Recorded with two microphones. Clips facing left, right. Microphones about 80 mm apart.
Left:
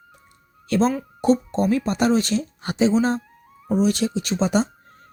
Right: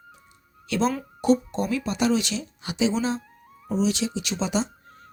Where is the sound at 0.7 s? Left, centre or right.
Left.